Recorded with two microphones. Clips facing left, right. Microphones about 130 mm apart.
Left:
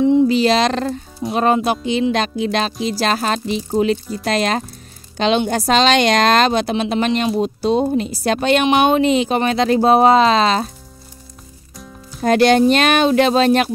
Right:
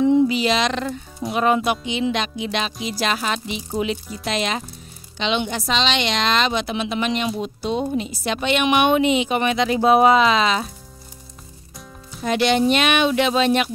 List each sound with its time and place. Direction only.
0.3 s speech: 35° left (ahead or behind)
12.2 s speech: 40° left (ahead or behind)